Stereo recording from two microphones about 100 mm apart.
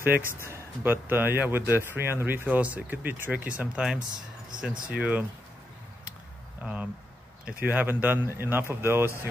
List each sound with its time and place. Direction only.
0.2 s speech: 25° left (ahead or behind)
0.5 s speech: 20° right (ahead or behind)
6.6 s speech: 15° right (ahead or behind)